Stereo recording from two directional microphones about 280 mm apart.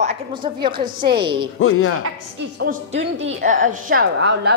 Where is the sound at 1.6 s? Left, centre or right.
Left.